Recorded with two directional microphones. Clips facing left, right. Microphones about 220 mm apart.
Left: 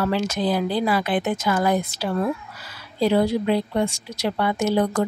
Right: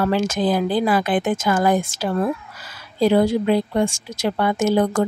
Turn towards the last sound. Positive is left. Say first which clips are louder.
# right 3 dB
turn(degrees=-50)  # may be behind; listen again after turning